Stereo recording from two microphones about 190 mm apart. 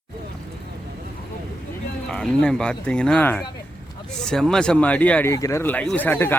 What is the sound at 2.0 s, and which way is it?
Speech, 5° left (ahead or behind).